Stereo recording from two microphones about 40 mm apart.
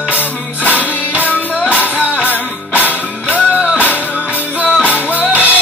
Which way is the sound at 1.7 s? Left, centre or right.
Left.